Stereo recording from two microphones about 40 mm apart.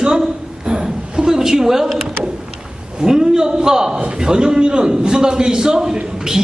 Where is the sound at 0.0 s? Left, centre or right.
Centre.